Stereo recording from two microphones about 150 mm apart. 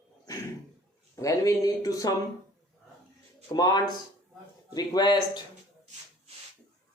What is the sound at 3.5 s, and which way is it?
Speech, 25° left (ahead or behind).